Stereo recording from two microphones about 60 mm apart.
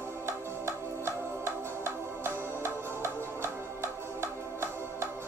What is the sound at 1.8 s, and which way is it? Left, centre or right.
Music, right.